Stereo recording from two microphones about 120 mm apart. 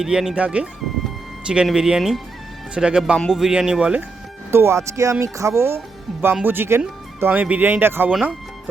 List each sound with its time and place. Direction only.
0.0 s speech: 5° right (ahead or behind)
4.5 s speech: 20° right (ahead or behind)
8.1 s speech: centre (ahead or behind)